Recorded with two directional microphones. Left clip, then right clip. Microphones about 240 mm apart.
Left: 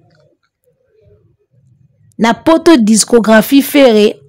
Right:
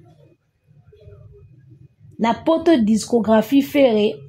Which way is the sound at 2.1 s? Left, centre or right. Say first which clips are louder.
Left 8 dB; left.